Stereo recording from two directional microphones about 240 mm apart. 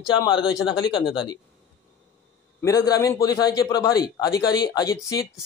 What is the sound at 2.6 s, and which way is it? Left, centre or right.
A man's voice, centre.